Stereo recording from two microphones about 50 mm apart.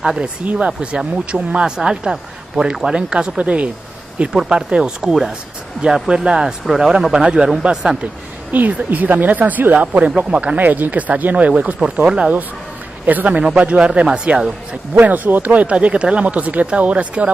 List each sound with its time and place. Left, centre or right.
0.2 s speech: right; by 6.9 s centre
7.1 s speech: centre
8.5 s speech: right
10.6 s speech: right
15.0 s speech: right